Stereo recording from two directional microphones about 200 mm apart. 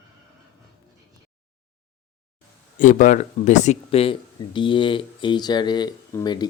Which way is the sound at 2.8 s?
40° left (ahead or behind).